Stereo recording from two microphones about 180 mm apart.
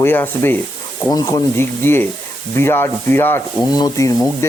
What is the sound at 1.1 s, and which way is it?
Speech, 20° left (ahead or behind).